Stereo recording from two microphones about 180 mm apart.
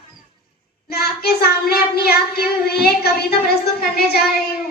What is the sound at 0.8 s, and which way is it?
A child's voice, 60° left (ahead or behind).